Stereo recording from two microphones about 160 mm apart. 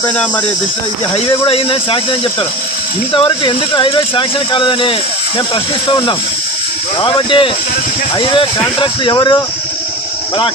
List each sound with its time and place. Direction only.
1.5 s speech: 35° left (ahead or behind)
3.1 s speech: 30° left (ahead or behind)